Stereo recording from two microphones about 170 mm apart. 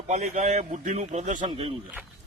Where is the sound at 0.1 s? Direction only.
40° right (ahead or behind).